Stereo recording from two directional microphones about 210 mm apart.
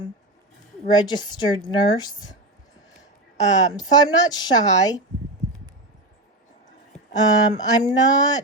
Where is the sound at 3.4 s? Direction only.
15° left (ahead or behind).